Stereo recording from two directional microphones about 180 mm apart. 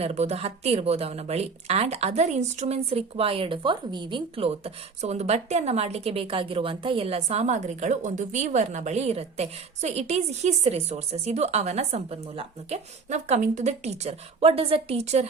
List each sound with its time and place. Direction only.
0.0 s a woman's voice: 35° right (ahead or behind)